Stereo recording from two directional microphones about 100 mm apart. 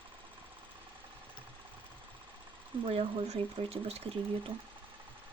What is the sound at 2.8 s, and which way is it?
Speech, 65° right (ahead or behind).